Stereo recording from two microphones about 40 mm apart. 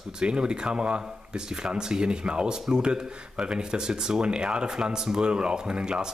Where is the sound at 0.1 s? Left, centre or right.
Right.